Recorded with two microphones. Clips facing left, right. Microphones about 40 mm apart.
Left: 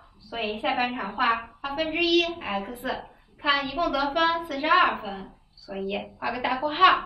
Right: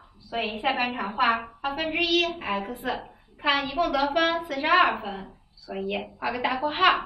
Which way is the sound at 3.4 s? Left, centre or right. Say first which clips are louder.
Even; right.